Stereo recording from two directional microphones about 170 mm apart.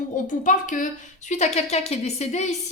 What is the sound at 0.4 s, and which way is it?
A woman's voice, 50° left (ahead or behind).